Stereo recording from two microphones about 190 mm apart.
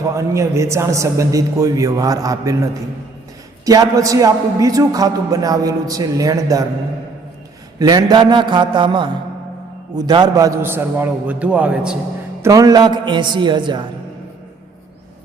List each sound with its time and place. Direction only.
0.2 s a man's voice: 15° right (ahead or behind)
3.7 s a man's voice: 20° right (ahead or behind)
7.8 s a man's voice: 20° right (ahead or behind)
12.4 s a man's voice: 20° right (ahead or behind)